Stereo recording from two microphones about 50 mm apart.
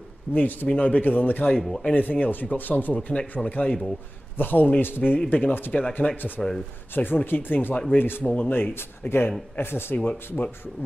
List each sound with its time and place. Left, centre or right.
0.3 s speech: left
1.7 s speech: centre
2.0 s speech: left
4.4 s speech: left
5.7 s speech: left
6.1 s speech: left
9.9 s speech: left